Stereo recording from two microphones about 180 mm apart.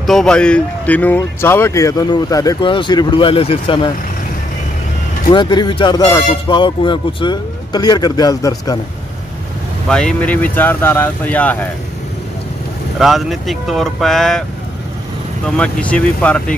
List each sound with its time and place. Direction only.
0.0 s speech: centre (ahead or behind); by 3.9 s 30° left (ahead or behind)
5.3 s speech: 25° left (ahead or behind)
9.8 s speech: 5° left (ahead or behind)
13.0 s speech: centre (ahead or behind)
15.4 s speech: 5° left (ahead or behind)